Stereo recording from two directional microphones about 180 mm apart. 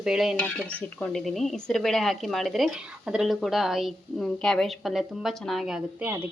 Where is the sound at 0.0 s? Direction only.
5° right (ahead or behind).